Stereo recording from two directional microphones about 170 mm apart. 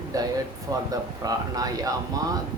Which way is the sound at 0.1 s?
20° right (ahead or behind).